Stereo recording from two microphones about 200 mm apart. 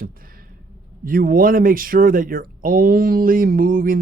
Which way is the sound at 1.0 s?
45° right (ahead or behind).